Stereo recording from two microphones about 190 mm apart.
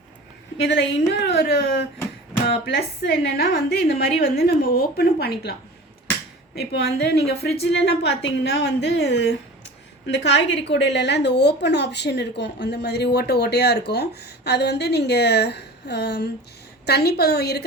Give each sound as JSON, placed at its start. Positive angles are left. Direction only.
{"t": 0.7, "sound": "a woman's voice", "side_deg": 65}
{"t": 6.7, "sound": "a woman's voice", "side_deg": 60}